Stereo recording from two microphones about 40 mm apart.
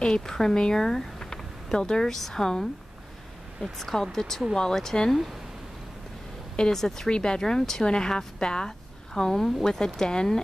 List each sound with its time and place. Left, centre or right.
0.0 s speech: centre
3.7 s speech: centre
6.7 s speech: centre